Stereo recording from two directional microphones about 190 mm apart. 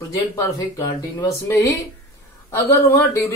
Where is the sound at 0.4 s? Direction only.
15° left (ahead or behind).